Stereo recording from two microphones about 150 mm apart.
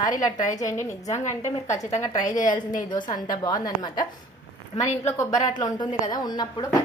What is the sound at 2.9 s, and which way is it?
A woman's voice, 30° left (ahead or behind).